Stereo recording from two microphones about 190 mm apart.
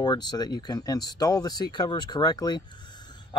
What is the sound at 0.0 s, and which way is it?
Speech, 20° left (ahead or behind).